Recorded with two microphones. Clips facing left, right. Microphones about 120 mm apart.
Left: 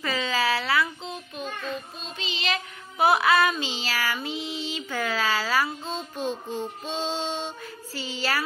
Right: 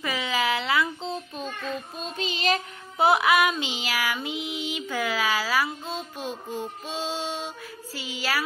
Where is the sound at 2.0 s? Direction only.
45° right (ahead or behind).